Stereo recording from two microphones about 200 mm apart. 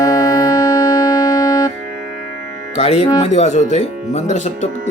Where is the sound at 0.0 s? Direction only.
20° left (ahead or behind).